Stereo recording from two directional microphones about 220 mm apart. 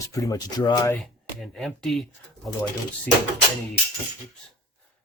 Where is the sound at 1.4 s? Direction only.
Centre (ahead or behind).